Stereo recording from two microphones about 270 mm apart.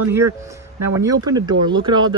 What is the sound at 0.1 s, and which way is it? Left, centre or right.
Speech, centre.